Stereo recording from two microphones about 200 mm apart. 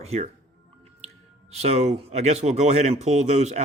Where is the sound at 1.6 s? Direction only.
30° right (ahead or behind).